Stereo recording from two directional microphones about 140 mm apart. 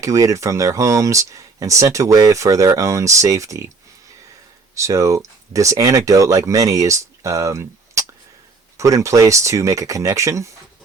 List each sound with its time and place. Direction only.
0.0 s speech: 25° right (ahead or behind)
4.7 s speech: 20° right (ahead or behind)